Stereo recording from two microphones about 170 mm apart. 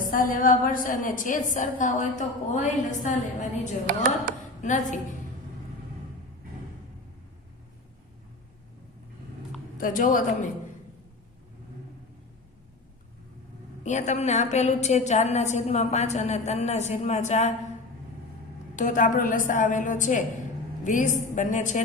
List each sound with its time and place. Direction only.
0.1 s a woman's voice: 55° left (ahead or behind)
3.9 s speech: 60° right (ahead or behind)
4.6 s a woman's voice: 45° left (ahead or behind)
9.7 s a woman's voice: 55° left (ahead or behind)
13.8 s a woman's voice: 45° left (ahead or behind)
18.8 s a woman's voice: 50° left (ahead or behind)